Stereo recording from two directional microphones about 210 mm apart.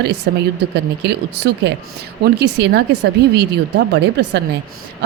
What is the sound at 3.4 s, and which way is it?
Speech, 55° right (ahead or behind).